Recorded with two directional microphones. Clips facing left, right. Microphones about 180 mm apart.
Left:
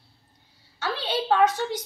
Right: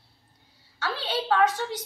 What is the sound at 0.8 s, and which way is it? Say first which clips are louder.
Speech: left 2 dB; 20° left (ahead or behind).